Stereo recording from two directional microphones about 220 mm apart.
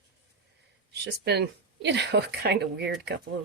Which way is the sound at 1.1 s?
50° right (ahead or behind).